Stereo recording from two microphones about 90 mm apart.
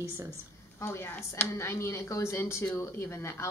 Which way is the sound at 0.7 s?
30° left (ahead or behind).